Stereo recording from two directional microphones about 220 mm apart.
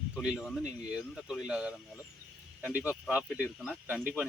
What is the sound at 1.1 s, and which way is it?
Speech, 5° right (ahead or behind).